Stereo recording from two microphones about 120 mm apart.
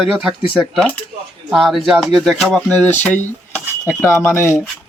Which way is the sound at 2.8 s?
10° left (ahead or behind).